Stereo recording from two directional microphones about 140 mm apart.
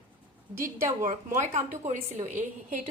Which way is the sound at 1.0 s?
65° right (ahead or behind).